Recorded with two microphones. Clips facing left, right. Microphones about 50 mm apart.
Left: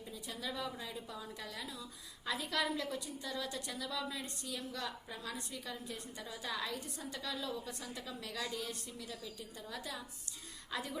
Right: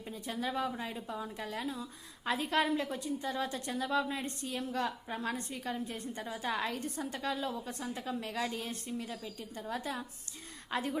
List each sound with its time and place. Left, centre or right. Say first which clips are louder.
0.1 s a woman's voice: right 7 dB; right